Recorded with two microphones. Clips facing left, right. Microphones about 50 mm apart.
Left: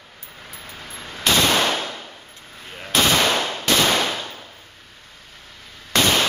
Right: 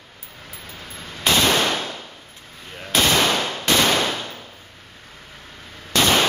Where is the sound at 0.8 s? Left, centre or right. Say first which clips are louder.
Left 1 dB; centre.